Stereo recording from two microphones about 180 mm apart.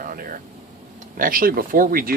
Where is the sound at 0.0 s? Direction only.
50° right (ahead or behind).